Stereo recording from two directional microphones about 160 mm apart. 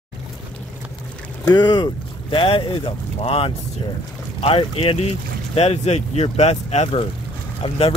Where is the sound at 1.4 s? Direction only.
25° left (ahead or behind).